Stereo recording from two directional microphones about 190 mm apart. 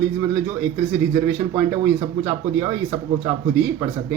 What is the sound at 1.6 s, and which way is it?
Speech, 10° right (ahead or behind).